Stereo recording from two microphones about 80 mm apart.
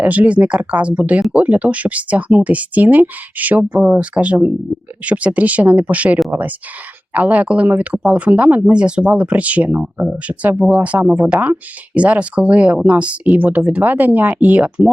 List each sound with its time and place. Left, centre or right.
0.0 s speech: centre